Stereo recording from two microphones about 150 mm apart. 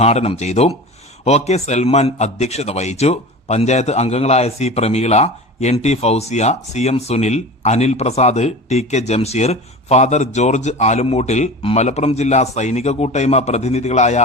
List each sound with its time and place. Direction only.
0.0 s a man's voice: 45° left (ahead or behind)